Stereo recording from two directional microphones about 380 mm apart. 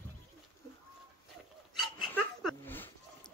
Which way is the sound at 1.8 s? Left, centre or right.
Centre.